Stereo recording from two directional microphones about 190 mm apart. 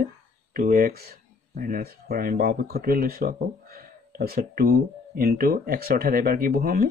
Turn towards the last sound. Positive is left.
turn(degrees=-55)  # may be behind; listen again after turning